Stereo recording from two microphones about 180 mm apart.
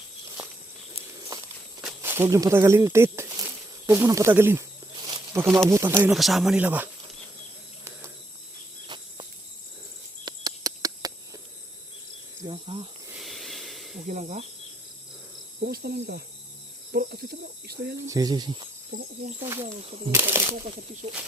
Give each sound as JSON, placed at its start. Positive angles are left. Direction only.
{"t": 2.0, "sound": "speech", "side_deg": -15}
{"t": 5.0, "sound": "a sound", "side_deg": -20}
{"t": 5.6, "sound": "speech", "side_deg": -15}
{"t": 6.1, "sound": "speech", "side_deg": 0}
{"t": 10.2, "sound": "a sound", "side_deg": -20}
{"t": 12.5, "sound": "cricket", "side_deg": -30}
{"t": 13.1, "sound": "a sound", "side_deg": 0}
{"t": 14.1, "sound": "speech", "side_deg": -40}
{"t": 15.6, "sound": "speech", "side_deg": -60}
{"t": 18.1, "sound": "speech", "side_deg": -20}
{"t": 18.9, "sound": "speech", "side_deg": -50}
{"t": 19.4, "sound": "speech", "side_deg": -15}
{"t": 19.6, "sound": "speech", "side_deg": -35}
{"t": 20.1, "sound": "speech", "side_deg": -15}